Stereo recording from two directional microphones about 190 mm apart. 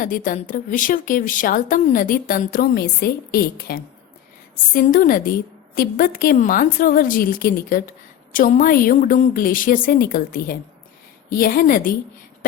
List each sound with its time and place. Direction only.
0.0 s speech: 45° left (ahead or behind)